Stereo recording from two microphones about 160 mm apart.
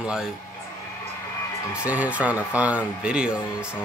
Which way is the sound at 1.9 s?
10° right (ahead or behind).